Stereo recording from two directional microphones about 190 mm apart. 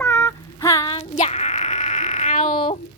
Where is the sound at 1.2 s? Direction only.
35° left (ahead or behind).